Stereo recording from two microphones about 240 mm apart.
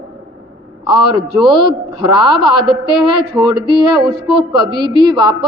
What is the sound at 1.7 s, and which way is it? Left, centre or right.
Speech, centre.